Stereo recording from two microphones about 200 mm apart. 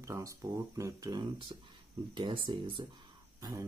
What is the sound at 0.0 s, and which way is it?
Speech, 15° right (ahead or behind).